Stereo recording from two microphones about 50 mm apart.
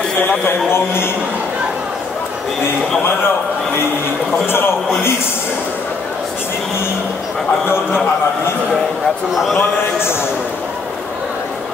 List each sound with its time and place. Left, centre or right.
0.5 s speech: left
4.5 s speech: left
9.6 s a man's voice: left